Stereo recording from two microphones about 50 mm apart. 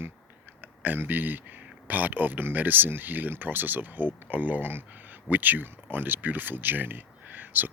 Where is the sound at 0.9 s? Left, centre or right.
Right.